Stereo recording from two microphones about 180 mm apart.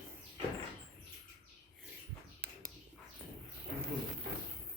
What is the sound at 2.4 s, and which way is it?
Bird, 65° right (ahead or behind).